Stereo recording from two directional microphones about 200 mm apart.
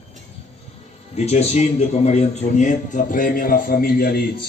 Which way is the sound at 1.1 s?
30° left (ahead or behind).